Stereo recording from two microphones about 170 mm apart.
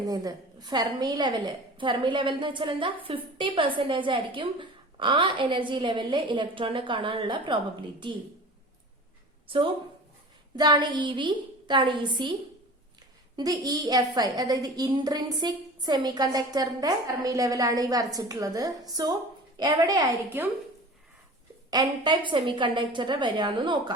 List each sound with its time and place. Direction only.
0.0 s a woman's voice: 20° right (ahead or behind)
9.5 s a woman's voice: 30° right (ahead or behind)
13.3 s a woman's voice: 20° right (ahead or behind)
20.4 s a woman's voice: 10° right (ahead or behind)
21.7 s a woman's voice: 25° right (ahead or behind)